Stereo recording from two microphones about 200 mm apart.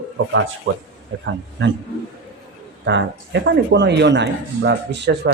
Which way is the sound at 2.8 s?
60° right (ahead or behind).